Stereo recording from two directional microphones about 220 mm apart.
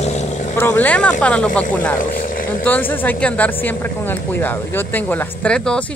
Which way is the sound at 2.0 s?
40° left (ahead or behind).